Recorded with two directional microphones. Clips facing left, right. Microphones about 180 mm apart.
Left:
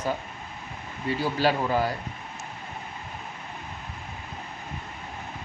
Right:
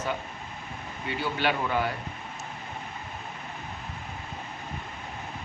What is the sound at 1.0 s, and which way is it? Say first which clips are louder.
Speech: left 4 dB; 35° left (ahead or behind).